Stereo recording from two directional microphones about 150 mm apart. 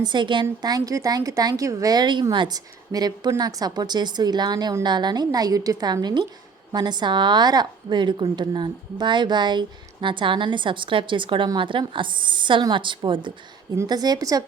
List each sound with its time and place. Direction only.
0.0 s a woman's voice: 30° right (ahead or behind)